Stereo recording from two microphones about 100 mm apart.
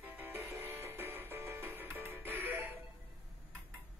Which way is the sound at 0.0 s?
20° right (ahead or behind).